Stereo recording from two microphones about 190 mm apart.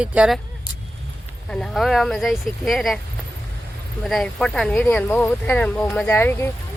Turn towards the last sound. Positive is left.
turn(degrees=10)  # may be behind; listen again after turning